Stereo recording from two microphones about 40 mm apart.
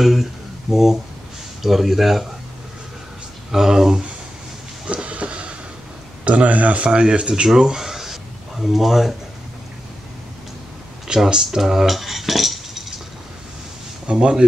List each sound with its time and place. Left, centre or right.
0.0 s speech: centre
3.5 s speech: centre
4.8 s a sound: right
6.2 s speech: right
7.4 s a sound: centre
11.2 s speech: centre
11.6 s cutlery: centre
14.1 s speech: right